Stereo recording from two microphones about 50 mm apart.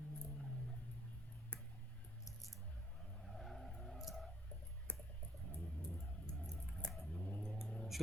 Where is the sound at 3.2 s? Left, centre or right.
Centre.